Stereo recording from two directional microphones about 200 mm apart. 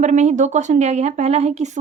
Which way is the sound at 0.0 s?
35° right (ahead or behind).